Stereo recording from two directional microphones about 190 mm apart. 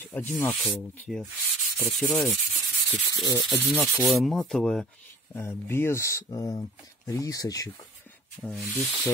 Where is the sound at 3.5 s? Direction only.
5° left (ahead or behind).